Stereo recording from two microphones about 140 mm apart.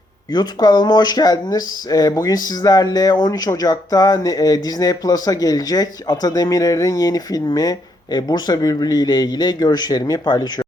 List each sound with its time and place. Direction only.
0.3 s speech: 30° left (ahead or behind)